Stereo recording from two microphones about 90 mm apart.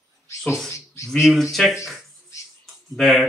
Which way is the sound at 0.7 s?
35° left (ahead or behind).